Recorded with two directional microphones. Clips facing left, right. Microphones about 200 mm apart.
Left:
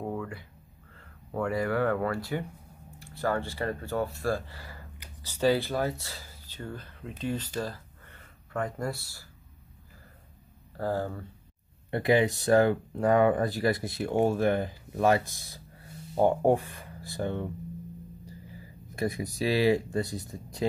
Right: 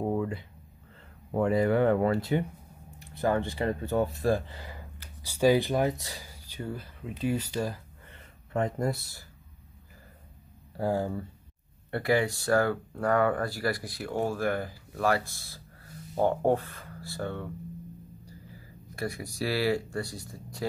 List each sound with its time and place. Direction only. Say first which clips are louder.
0.0 s a sound: right 5 dB; 25° right (ahead or behind)
1.3 s speech: right 4 dB; 25° right (ahead or behind)
10.8 s speech: right 2 dB; 10° right (ahead or behind)
11.9 s speech: left 2 dB; 20° left (ahead or behind)
18.9 s speech: left 3 dB; 20° left (ahead or behind)